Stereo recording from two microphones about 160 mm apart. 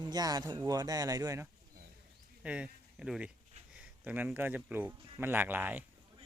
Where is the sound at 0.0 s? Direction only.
25° right (ahead or behind).